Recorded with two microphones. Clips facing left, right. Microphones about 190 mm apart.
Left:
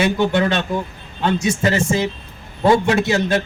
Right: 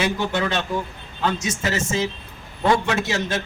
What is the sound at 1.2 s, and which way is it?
A man's voice, 30° left (ahead or behind).